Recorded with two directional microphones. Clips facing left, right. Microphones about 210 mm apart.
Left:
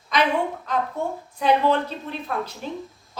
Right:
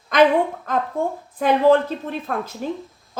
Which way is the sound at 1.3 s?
50° right (ahead or behind).